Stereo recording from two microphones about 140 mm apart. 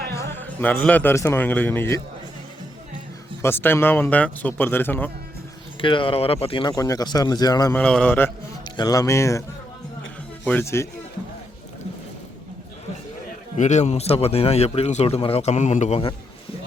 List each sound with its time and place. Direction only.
0.2 s a man's voice: 15° left (ahead or behind)
3.4 s speech: 15° left (ahead or behind)
5.8 s speech: 35° left (ahead or behind)
7.7 s speech: 10° left (ahead or behind)
8.7 s speech: 30° left (ahead or behind)
10.5 s speech: 20° left (ahead or behind)
13.6 s a man's voice: 55° left (ahead or behind)